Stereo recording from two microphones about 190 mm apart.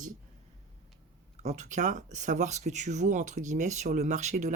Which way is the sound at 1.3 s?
40° right (ahead or behind).